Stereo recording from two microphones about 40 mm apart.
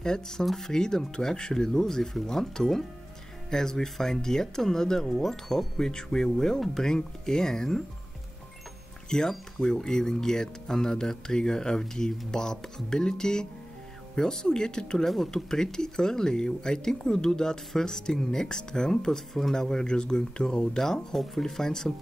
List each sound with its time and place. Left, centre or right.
0.0 s speech: centre
0.5 s speech: centre
0.7 s speech: centre
9.1 s speech: centre